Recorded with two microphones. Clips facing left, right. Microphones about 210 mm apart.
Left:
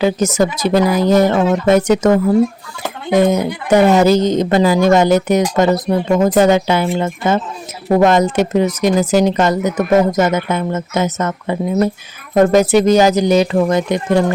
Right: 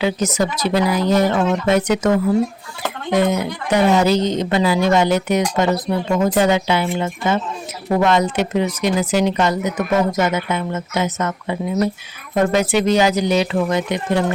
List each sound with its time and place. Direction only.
0.0 s speech: 45° left (ahead or behind)